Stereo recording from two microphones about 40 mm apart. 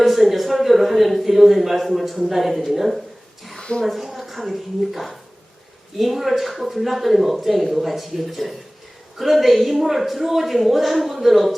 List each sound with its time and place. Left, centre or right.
0.0 s speech: centre